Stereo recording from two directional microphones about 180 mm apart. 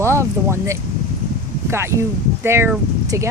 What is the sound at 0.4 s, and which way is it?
Speech, 15° right (ahead or behind).